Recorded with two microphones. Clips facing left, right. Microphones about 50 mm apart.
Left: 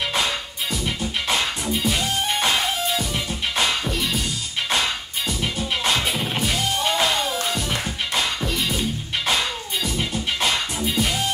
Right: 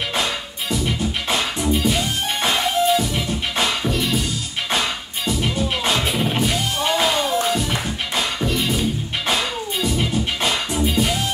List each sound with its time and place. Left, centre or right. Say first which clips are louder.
0.1 s music: right 1 dB; centre